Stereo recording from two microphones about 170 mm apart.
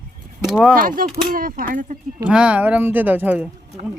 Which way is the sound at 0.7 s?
55° right (ahead or behind).